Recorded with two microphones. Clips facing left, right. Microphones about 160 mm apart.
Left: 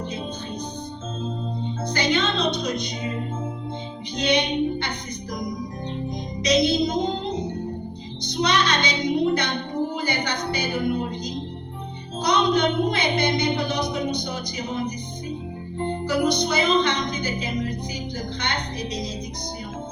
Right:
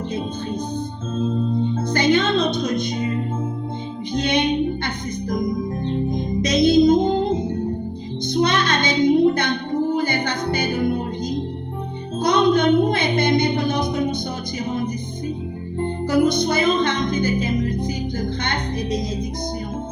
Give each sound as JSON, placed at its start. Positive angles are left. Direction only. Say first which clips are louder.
{"t": 1.7, "sound": "music", "louder": "right 4 dB", "side_deg": -50}
{"t": 4.1, "sound": "music", "louder": "right 3 dB", "side_deg": -50}
{"t": 6.1, "sound": "music", "louder": "right 3 dB", "side_deg": -50}
{"t": 8.3, "sound": "child singing", "louder": "right 3 dB", "side_deg": -50}
{"t": 9.9, "sound": "music", "louder": "right 5 dB", "side_deg": -50}
{"t": 12.2, "sound": "a sound", "louder": "right 4 dB", "side_deg": -50}
{"t": 16.0, "sound": "music", "louder": "right 5 dB", "side_deg": -50}